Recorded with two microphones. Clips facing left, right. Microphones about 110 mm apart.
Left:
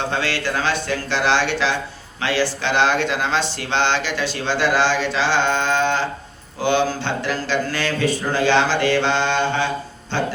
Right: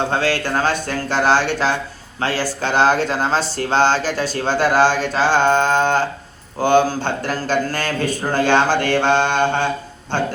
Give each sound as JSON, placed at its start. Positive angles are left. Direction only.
{"t": 0.1, "sound": "speech", "side_deg": -45}